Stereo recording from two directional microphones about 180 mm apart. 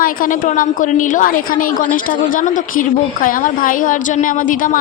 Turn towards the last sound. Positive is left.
turn(degrees=50)  # may be behind; listen again after turning